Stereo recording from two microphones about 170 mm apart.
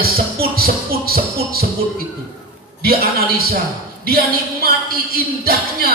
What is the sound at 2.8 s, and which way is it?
Speech, 65° right (ahead or behind).